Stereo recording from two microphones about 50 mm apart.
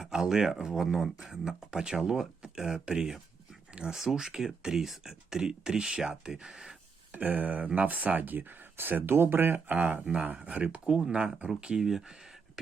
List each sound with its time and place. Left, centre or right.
0.0 s speech: centre
3.7 s a sound: centre
3.9 s speech: centre
7.1 s speech: right
11.9 s speech: centre